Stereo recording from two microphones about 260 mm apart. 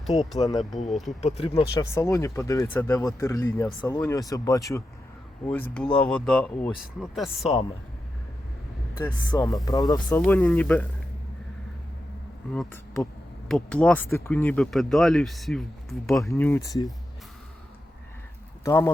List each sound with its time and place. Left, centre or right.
0.0 s speech: centre
1.2 s speech: left
1.8 s speech: centre
9.0 s speech: centre
12.5 s speech: centre
18.6 s speech: centre